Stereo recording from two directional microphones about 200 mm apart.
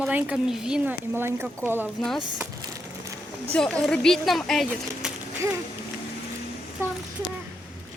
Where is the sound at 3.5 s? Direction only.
5° left (ahead or behind).